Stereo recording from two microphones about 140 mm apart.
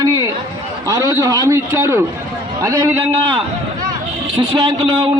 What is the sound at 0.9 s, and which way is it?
A man's voice, 25° right (ahead or behind).